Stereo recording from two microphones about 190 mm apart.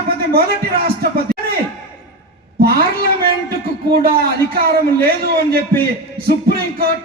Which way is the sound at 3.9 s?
50° right (ahead or behind).